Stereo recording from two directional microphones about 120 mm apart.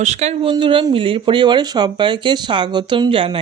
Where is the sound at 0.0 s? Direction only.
70° right (ahead or behind).